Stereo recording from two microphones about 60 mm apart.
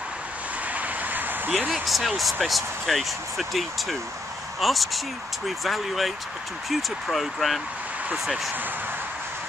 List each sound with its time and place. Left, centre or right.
0.7 s vehicle: right
1.7 s speech: centre